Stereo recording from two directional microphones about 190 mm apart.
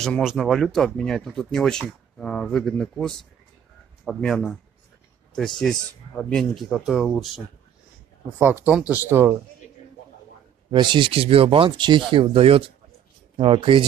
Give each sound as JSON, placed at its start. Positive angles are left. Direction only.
{"t": 0.0, "sound": "speech", "side_deg": 0}
{"t": 8.6, "sound": "speech", "side_deg": -5}
{"t": 10.7, "sound": "speech", "side_deg": -25}